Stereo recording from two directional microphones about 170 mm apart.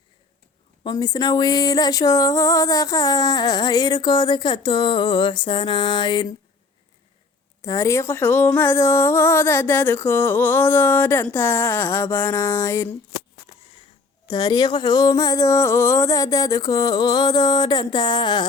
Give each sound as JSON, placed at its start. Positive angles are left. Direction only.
{"t": 0.9, "sound": "speech", "side_deg": 25}
{"t": 7.6, "sound": "speech", "side_deg": 20}
{"t": 14.3, "sound": "speech", "side_deg": 25}